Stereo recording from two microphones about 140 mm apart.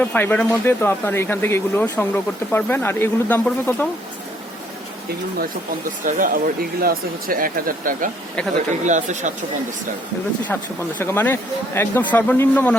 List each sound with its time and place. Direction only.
0.0 s speech: 10° left (ahead or behind)
6.1 s speech: 75° right (ahead or behind)
8.8 s speech: 60° right (ahead or behind)
10.5 s speech: 15° left (ahead or behind)